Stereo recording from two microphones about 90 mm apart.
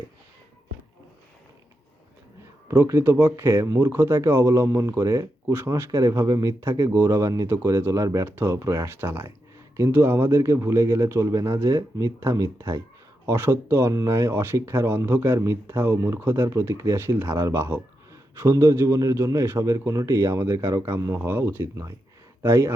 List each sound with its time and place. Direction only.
2.6 s speech: 30° right (ahead or behind)